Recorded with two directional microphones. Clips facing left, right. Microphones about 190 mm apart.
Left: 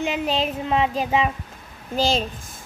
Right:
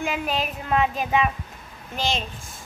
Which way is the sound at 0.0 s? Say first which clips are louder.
Left 3 dB; 25° left (ahead or behind).